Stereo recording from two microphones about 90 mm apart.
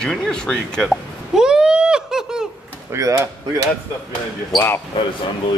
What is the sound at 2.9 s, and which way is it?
Speech, 35° right (ahead or behind).